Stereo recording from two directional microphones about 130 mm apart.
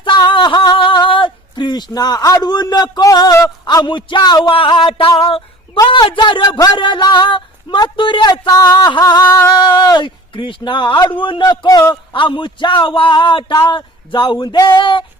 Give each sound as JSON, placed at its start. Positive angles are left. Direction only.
{"t": 0.0, "sound": "a sound", "side_deg": 40}
{"t": 3.8, "sound": "speech", "side_deg": 35}
{"t": 9.2, "sound": "singing", "side_deg": 20}
{"t": 9.5, "sound": "speech", "side_deg": 35}